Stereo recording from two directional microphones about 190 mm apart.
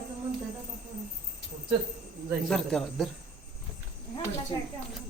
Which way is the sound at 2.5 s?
5° left (ahead or behind).